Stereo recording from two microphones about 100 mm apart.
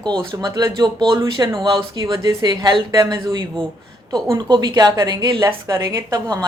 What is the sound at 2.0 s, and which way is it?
A woman's voice, 35° right (ahead or behind).